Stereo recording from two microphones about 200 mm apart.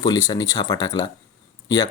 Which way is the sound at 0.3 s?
20° left (ahead or behind).